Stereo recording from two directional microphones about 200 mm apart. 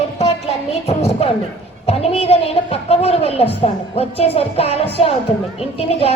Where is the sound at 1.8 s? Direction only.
30° left (ahead or behind).